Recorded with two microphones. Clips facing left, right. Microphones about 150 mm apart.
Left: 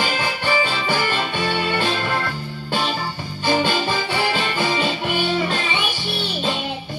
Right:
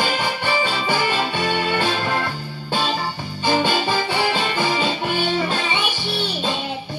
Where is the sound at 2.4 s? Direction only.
15° right (ahead or behind).